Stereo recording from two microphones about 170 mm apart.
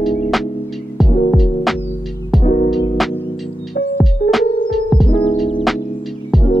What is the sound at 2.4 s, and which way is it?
Music, 45° left (ahead or behind).